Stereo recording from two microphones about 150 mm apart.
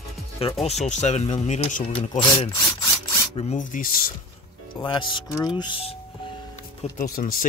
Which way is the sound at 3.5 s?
65° left (ahead or behind).